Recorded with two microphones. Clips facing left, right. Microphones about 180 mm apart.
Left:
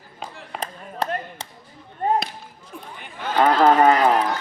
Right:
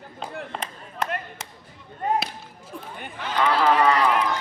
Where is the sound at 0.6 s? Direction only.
35° left (ahead or behind).